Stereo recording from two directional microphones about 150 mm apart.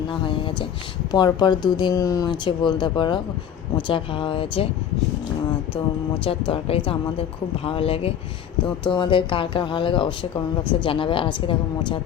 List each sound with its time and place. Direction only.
0.1 s a woman's voice: 35° left (ahead or behind)
6.2 s a woman's voice: 35° left (ahead or behind)